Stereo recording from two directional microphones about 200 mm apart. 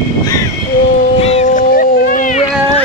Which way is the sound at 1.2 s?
35° left (ahead or behind).